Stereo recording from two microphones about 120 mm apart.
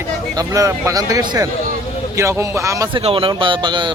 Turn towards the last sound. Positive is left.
turn(degrees=-40)  # may be behind; listen again after turning